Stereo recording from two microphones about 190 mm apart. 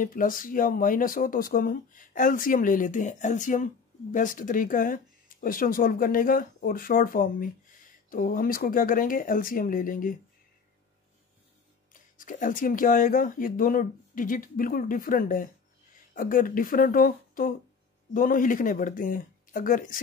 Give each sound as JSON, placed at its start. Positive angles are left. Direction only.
{"t": 0.0, "sound": "speech", "side_deg": 45}
{"t": 11.9, "sound": "speech", "side_deg": 45}